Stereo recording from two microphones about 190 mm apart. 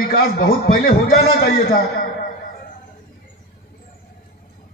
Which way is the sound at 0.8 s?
50° left (ahead or behind).